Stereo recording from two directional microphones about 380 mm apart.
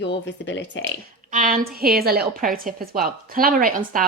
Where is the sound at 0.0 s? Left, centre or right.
Left.